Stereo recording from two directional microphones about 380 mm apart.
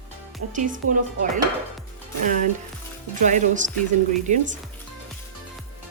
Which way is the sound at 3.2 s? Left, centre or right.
Centre.